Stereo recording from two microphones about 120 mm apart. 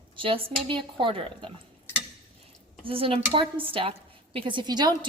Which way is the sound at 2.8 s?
50° right (ahead or behind).